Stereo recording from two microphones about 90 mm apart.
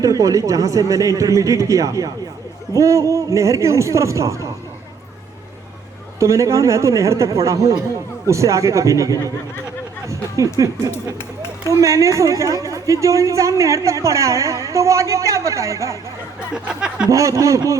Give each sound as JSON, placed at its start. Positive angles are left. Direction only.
{"t": 0.0, "sound": "a woman's voice", "side_deg": -40}
{"t": 6.1, "sound": "a woman's voice", "side_deg": -35}
{"t": 16.6, "sound": "a sound", "side_deg": -10}
{"t": 17.1, "sound": "a woman's voice", "side_deg": -35}